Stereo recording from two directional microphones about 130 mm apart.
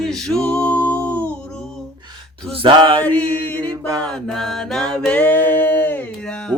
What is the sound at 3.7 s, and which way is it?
Mantra, 25° right (ahead or behind).